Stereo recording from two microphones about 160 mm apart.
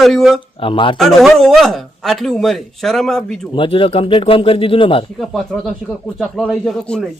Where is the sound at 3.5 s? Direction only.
35° left (ahead or behind).